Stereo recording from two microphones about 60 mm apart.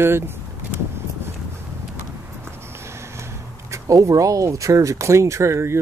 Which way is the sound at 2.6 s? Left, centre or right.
Right.